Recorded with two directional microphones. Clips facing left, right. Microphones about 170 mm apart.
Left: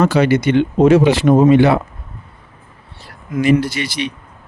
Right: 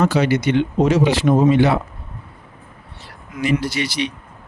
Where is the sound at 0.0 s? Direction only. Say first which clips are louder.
Left 3 dB; 60° left (ahead or behind).